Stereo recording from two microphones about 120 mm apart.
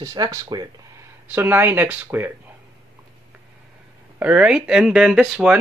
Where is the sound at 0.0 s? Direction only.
30° right (ahead or behind).